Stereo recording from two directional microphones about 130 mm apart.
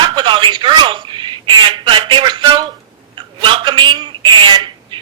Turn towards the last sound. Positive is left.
turn(degrees=-35)  # may be behind; listen again after turning